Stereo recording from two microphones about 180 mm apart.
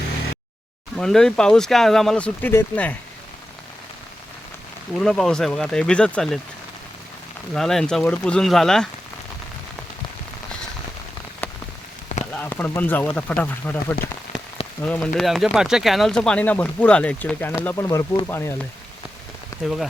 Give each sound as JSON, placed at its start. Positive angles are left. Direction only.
{"t": 0.9, "sound": "speech", "side_deg": 0}
{"t": 4.9, "sound": "speech", "side_deg": 0}
{"t": 7.5, "sound": "speech", "side_deg": 0}
{"t": 11.4, "sound": "rain on surface", "side_deg": 10}
{"t": 12.0, "sound": "rain on surface", "side_deg": 35}
{"t": 12.3, "sound": "speech", "side_deg": 10}
{"t": 19.6, "sound": "speech", "side_deg": 0}